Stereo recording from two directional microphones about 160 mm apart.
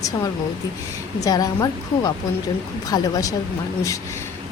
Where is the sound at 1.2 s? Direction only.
20° left (ahead or behind).